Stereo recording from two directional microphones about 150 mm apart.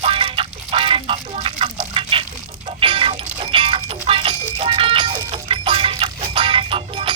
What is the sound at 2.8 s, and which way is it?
Music, 35° right (ahead or behind).